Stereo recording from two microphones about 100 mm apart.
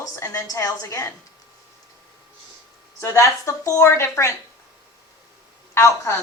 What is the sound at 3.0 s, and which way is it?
A woman's voice, 30° left (ahead or behind).